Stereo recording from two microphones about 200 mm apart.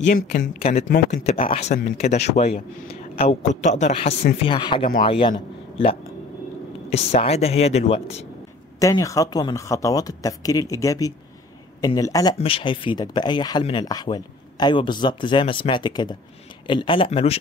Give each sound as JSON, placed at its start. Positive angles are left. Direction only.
{"t": 0.0, "sound": "speech", "side_deg": 40}
{"t": 6.9, "sound": "speech", "side_deg": 30}
{"t": 8.7, "sound": "speech", "side_deg": 15}